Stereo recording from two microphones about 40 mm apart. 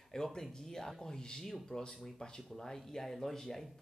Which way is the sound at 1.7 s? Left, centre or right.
Left.